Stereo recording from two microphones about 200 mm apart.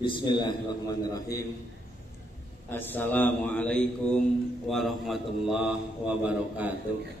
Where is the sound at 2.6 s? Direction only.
10° left (ahead or behind); by 6.7 s 5° right (ahead or behind).